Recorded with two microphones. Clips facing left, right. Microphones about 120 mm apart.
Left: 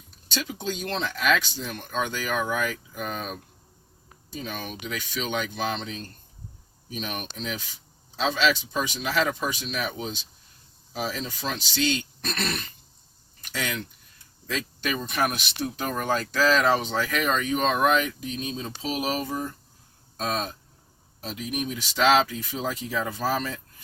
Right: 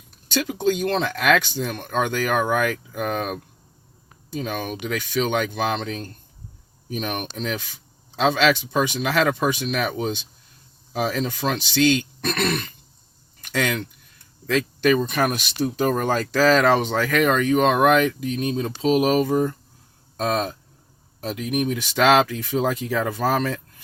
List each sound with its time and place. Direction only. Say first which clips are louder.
0.3 s speech: right 9 dB; 55° right (ahead or behind)
13.5 s speech: right 7 dB; 70° right (ahead or behind)